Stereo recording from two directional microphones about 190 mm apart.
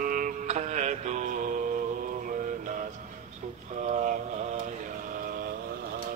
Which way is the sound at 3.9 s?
40° right (ahead or behind).